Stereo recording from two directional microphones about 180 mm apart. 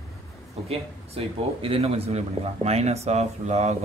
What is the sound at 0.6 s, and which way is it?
Speech, 30° right (ahead or behind).